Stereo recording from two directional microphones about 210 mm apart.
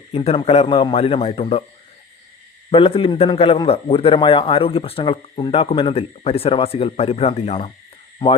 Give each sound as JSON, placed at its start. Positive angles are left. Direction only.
{"t": 0.1, "sound": "a man's voice", "side_deg": 25}
{"t": 2.6, "sound": "a man's voice", "side_deg": 25}